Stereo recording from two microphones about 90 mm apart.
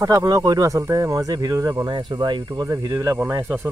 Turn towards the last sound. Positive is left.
turn(degrees=-20)  # may be behind; listen again after turning